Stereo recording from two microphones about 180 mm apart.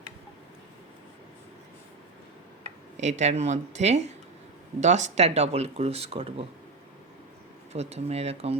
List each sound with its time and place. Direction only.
3.0 s speech: 40° right (ahead or behind)
7.7 s speech: 35° right (ahead or behind)